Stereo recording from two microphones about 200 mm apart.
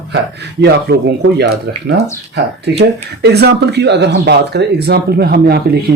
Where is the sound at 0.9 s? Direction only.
55° right (ahead or behind).